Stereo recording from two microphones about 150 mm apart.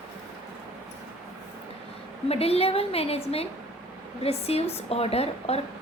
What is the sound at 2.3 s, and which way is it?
A woman's voice, 40° left (ahead or behind).